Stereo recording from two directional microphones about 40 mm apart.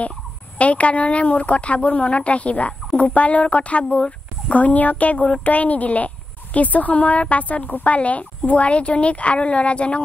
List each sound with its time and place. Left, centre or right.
0.6 s speech: left